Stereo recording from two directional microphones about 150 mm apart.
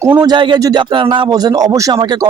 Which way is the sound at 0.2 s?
30° right (ahead or behind).